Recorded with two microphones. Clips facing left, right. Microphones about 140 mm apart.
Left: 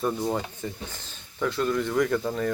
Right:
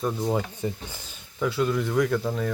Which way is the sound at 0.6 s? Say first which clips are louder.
Right 4 dB; 15° right (ahead or behind).